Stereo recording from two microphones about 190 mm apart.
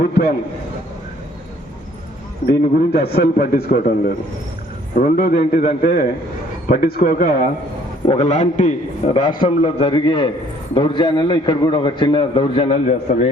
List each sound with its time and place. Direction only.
2.5 s a man's voice: 55° left (ahead or behind)
5.3 s a man's voice: 35° left (ahead or behind)
5.6 s speech: 50° left (ahead or behind)
8.0 s a man's voice: 35° left (ahead or behind)
9.6 s a man's voice: 30° left (ahead or behind)